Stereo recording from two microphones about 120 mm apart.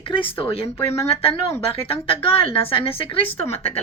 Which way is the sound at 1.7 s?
50° left (ahead or behind).